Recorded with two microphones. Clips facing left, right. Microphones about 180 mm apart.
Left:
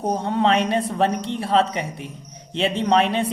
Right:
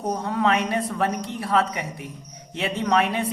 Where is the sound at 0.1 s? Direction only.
30° left (ahead or behind).